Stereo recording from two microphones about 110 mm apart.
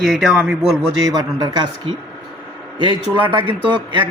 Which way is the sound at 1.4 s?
35° right (ahead or behind).